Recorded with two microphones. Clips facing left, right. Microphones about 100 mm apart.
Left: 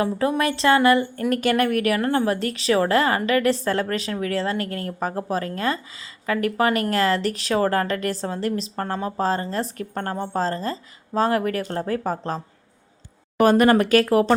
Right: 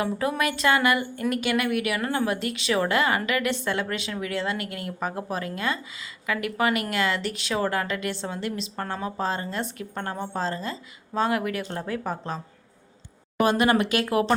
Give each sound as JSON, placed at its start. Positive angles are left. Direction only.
{"t": 0.0, "sound": "a woman's voice", "side_deg": 30}
{"t": 1.3, "sound": "a woman's voice", "side_deg": 40}
{"t": 13.4, "sound": "speech", "side_deg": 45}